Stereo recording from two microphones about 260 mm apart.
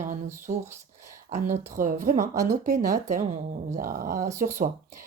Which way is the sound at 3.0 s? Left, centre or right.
Right.